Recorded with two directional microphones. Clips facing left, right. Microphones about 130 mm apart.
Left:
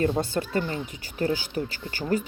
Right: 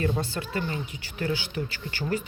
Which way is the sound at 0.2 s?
40° left (ahead or behind).